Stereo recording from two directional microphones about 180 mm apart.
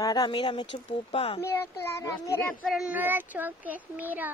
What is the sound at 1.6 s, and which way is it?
Speech, 15° left (ahead or behind).